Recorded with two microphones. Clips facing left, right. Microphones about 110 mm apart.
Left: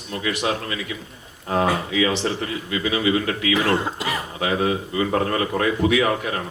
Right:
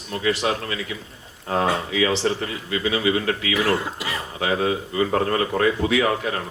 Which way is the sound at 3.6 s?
25° left (ahead or behind).